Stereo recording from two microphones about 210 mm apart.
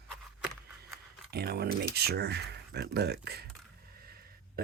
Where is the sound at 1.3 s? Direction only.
50° right (ahead or behind).